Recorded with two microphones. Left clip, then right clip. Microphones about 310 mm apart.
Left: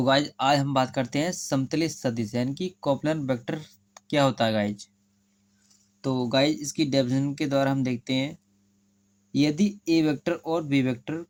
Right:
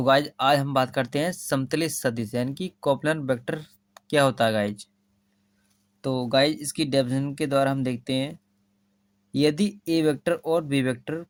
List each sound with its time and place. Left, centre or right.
0.0 s speech: centre
6.0 s speech: centre